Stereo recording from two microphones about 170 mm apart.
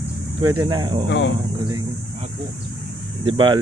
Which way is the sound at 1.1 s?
90° left.